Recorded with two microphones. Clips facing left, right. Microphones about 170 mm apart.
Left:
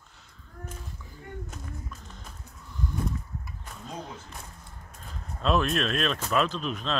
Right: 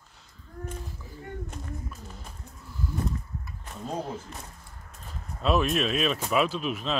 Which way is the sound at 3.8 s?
40° right (ahead or behind).